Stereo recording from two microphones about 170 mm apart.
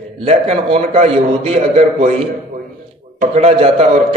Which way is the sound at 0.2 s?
30° right (ahead or behind).